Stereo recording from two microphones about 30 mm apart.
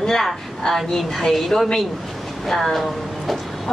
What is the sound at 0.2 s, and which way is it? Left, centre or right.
Speech, centre.